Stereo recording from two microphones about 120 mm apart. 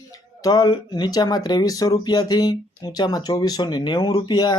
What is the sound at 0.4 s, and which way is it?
Speech, 35° left (ahead or behind).